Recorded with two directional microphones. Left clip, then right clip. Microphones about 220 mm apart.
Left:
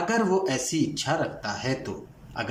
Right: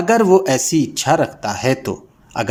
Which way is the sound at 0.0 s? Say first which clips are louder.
Right 11 dB; 35° right (ahead or behind).